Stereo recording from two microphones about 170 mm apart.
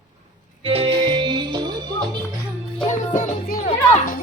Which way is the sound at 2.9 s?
45° left (ahead or behind).